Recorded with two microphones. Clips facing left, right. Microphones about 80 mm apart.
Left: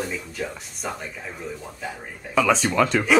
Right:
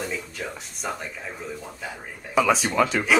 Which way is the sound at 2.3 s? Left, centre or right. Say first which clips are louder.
Left 1 dB; centre.